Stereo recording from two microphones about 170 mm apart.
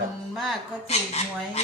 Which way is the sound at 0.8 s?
40° left (ahead or behind).